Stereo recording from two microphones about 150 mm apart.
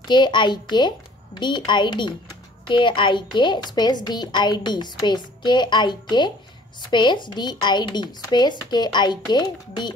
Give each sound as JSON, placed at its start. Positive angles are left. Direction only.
{"t": 0.1, "sound": "a woman's voice", "side_deg": 30}